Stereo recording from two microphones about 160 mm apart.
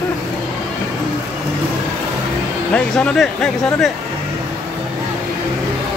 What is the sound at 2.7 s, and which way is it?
Speech, 5° left (ahead or behind).